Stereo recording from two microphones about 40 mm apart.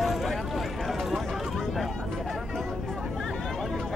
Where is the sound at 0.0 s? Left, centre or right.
Centre.